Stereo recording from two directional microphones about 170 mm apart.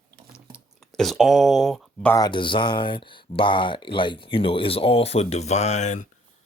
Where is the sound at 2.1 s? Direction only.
25° left (ahead or behind).